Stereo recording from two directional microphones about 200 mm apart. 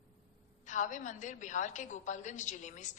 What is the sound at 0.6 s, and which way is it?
A woman's voice, 40° left (ahead or behind).